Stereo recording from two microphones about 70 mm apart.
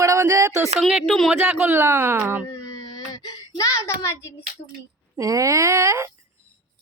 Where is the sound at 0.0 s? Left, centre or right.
Right.